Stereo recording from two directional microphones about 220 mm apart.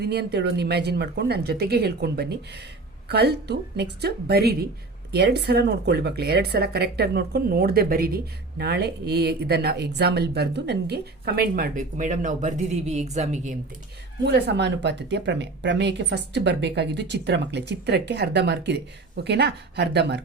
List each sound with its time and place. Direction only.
0.0 s speech: 50° right (ahead or behind); by 13.6 s 35° right (ahead or behind)
14.3 s speech: 50° right (ahead or behind)